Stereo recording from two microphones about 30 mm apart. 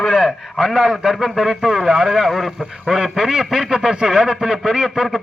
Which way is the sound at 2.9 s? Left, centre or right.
Centre.